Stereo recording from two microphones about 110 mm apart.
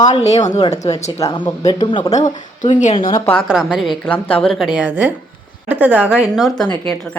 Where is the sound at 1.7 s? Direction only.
45° left (ahead or behind).